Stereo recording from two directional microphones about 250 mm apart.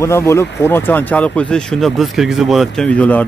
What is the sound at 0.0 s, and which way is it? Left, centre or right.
A man's voice, centre.